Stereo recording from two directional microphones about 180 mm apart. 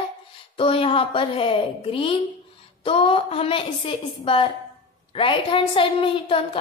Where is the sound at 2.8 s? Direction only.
30° left (ahead or behind).